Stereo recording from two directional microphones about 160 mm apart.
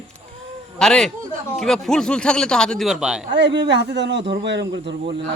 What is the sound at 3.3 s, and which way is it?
A man's voice, 90° right.